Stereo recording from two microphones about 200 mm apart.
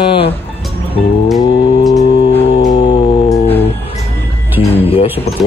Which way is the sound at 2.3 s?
30° left (ahead or behind).